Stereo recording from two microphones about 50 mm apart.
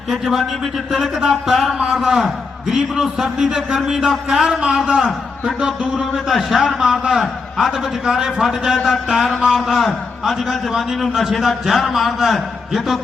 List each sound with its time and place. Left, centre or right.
0.1 s a man's voice: centre
1.8 s a man's voice: centre
6.0 s a man's voice: centre
9.6 s a man's voice: centre